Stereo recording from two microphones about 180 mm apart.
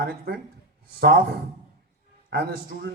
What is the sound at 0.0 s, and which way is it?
Speech, 55° right (ahead or behind).